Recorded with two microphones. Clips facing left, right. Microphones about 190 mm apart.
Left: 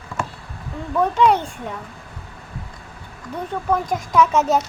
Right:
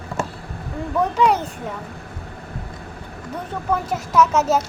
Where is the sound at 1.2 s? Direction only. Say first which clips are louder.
Left 2 dB; 5° right (ahead or behind).